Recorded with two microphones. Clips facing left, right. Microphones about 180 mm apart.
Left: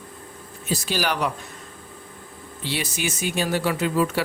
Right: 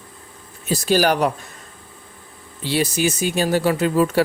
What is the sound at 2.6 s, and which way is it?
A man's voice, 35° right (ahead or behind).